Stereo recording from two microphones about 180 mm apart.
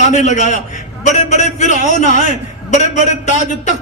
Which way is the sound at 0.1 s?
40° left (ahead or behind).